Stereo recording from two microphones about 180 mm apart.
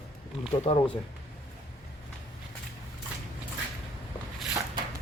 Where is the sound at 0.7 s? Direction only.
35° left (ahead or behind).